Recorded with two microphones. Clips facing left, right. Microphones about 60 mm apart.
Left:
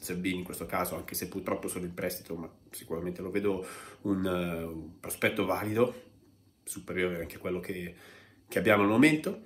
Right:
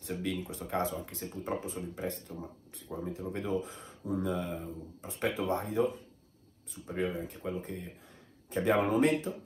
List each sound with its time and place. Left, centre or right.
0.1 s speech: left
6.7 s speech: left